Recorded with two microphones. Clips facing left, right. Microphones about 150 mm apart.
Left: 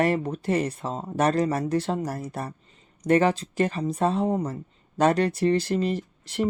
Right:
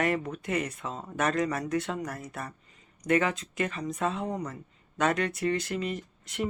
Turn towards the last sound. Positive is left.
turn(degrees=35)  # may be behind; listen again after turning